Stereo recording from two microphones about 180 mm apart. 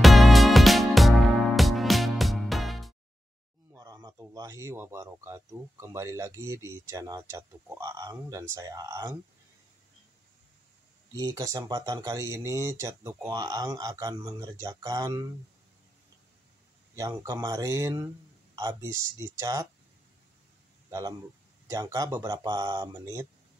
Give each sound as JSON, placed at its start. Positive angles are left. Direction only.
{"t": 0.0, "sound": "music", "side_deg": 0}
{"t": 3.7, "sound": "speech", "side_deg": -20}
{"t": 11.1, "sound": "speech", "side_deg": -20}
{"t": 16.9, "sound": "speech", "side_deg": -20}
{"t": 21.6, "sound": "speech", "side_deg": -20}